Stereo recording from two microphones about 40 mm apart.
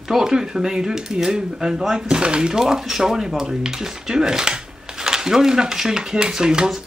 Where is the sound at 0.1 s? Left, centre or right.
Centre.